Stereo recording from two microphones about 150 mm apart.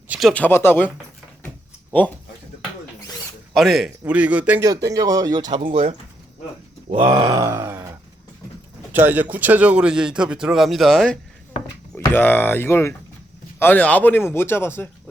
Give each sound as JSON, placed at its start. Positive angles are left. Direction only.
{"t": 0.1, "sound": "speech", "side_deg": 0}
{"t": 1.9, "sound": "speech", "side_deg": 10}
{"t": 3.5, "sound": "a man's voice", "side_deg": 0}
{"t": 4.6, "sound": "speech", "side_deg": -25}
{"t": 5.5, "sound": "speech", "side_deg": -40}
{"t": 7.1, "sound": "groan", "side_deg": -30}
{"t": 8.9, "sound": "a man's voice", "side_deg": -15}
{"t": 11.9, "sound": "speech", "side_deg": 15}